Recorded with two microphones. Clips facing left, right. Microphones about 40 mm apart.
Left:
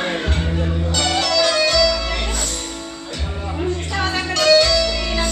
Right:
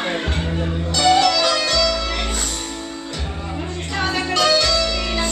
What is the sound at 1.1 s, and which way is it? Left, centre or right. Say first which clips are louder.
Music: right 4 dB; centre.